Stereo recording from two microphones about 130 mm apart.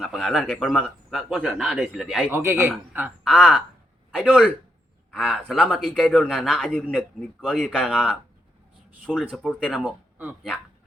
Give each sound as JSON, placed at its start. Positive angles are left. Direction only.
{"t": 0.0, "sound": "a man's voice", "side_deg": 0}
{"t": 2.3, "sound": "speech", "side_deg": -20}
{"t": 3.2, "sound": "a man's voice", "side_deg": 0}
{"t": 9.3, "sound": "a man's voice", "side_deg": 5}